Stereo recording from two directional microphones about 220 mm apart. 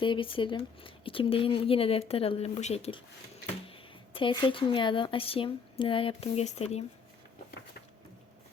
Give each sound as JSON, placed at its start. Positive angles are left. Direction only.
{"t": 0.0, "sound": "a woman's voice", "side_deg": 25}